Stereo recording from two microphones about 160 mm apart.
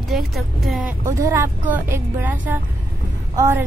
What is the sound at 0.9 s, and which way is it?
A woman's voice, 20° right (ahead or behind).